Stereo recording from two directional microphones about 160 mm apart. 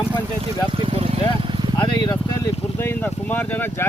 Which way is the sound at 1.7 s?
25° left (ahead or behind).